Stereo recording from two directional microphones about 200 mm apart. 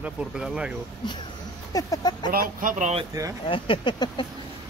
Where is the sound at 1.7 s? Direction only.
20° left (ahead or behind).